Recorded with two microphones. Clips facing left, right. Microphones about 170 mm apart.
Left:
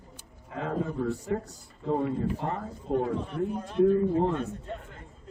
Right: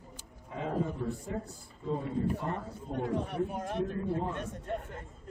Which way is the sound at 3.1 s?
60° right (ahead or behind).